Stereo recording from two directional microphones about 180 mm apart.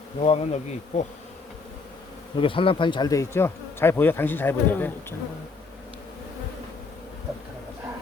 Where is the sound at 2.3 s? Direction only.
30° left (ahead or behind); by 5.2 s 10° left (ahead or behind).